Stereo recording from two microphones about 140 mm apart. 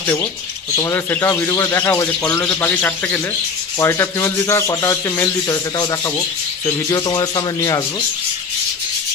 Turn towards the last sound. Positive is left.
turn(degrees=25)  # may be behind; listen again after turning